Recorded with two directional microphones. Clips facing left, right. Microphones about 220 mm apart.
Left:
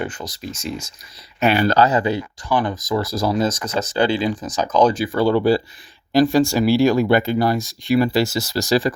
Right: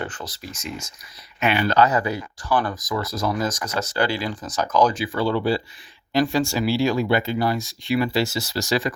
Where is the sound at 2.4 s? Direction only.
15° left (ahead or behind).